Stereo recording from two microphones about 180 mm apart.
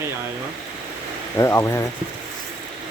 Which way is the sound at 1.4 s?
15° left (ahead or behind).